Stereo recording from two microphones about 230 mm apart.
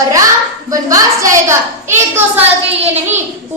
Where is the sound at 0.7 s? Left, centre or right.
Centre.